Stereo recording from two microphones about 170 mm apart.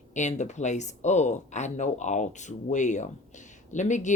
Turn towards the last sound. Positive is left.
turn(degrees=45)  # may be behind; listen again after turning